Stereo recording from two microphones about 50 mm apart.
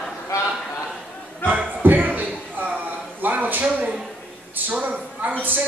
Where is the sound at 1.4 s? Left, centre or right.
Right.